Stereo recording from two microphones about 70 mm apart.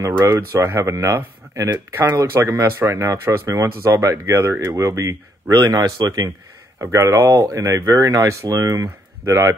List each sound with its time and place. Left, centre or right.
0.0 s speech: right
2.9 s speech: right
5.5 s speech: right
5.9 s speech: right
6.8 s speech: right